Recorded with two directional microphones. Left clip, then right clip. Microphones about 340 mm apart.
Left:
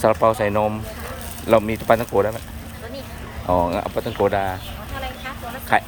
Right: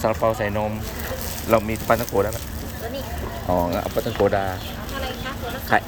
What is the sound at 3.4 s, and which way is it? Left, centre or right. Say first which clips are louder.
Speech: left 3 dB; left.